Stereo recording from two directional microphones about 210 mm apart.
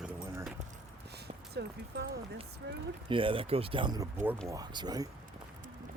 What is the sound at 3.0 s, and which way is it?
A man's voice, 25° right (ahead or behind).